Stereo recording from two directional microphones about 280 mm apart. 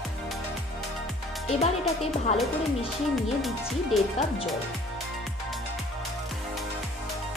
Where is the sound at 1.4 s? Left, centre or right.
Left.